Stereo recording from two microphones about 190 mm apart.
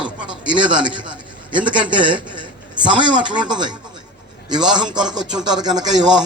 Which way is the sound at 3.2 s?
25° right (ahead or behind).